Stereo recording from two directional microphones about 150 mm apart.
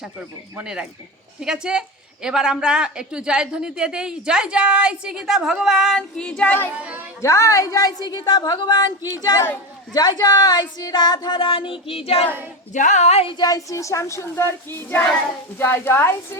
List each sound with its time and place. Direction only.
0.0 s a man's voice: 5° right (ahead or behind); by 6.7 s 10° left (ahead or behind)
6.8 s a child's voice: 10° right (ahead or behind)
7.2 s speech: 20° left (ahead or behind); by 12.3 s 40° left (ahead or behind)
12.7 s a woman's voice: 55° left (ahead or behind)
13.3 s a woman's voice: 25° left (ahead or behind)